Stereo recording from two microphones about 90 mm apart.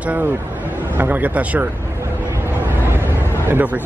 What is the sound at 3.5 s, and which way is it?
Speech, 20° right (ahead or behind).